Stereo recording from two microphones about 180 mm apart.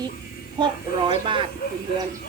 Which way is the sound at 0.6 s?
30° right (ahead or behind).